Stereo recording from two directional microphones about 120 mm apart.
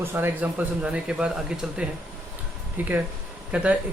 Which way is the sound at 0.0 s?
15° right (ahead or behind).